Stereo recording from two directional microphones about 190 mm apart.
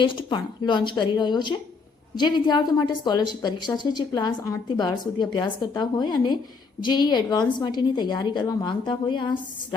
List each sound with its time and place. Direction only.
0.0 s a woman's voice: 25° left (ahead or behind)